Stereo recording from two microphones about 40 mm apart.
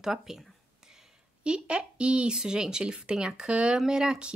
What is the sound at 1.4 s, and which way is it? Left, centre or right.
Speech, right.